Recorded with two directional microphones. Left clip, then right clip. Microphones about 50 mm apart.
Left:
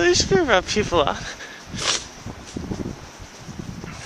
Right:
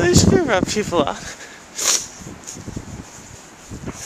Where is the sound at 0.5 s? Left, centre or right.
Centre.